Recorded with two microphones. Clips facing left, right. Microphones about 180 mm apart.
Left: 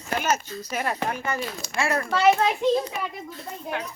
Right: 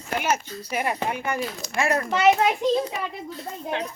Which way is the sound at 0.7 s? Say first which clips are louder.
Right 1 dB; 10° right (ahead or behind).